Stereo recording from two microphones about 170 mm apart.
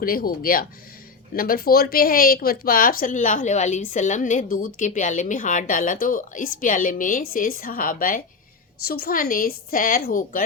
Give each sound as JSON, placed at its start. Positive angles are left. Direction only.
{"t": 0.0, "sound": "a woman's voice", "side_deg": 60}